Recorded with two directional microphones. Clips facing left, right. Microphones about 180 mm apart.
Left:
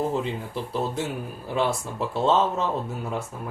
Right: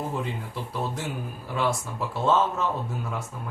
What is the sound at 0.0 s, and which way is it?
Speech, 30° left (ahead or behind).